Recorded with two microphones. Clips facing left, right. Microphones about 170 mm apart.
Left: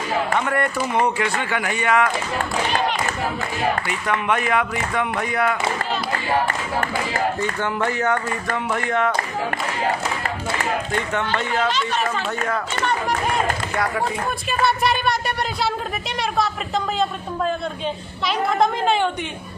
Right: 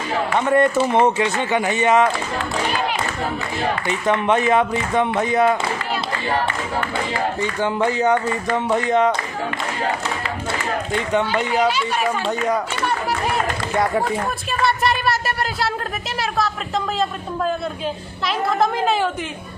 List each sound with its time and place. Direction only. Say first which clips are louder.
0.4 s speech: right 6 dB; 25° right (ahead or behind)
3.8 s speech: right 4 dB; 25° right (ahead or behind)
7.6 s speech: right 5 dB; 20° right (ahead or behind)
11.1 s speech: right 6 dB; 15° right (ahead or behind)
14.6 s a woman's voice: even; centre (ahead or behind)
18.3 s a woman's voice: even; centre (ahead or behind)